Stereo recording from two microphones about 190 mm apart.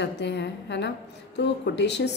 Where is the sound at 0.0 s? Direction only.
65° left (ahead or behind).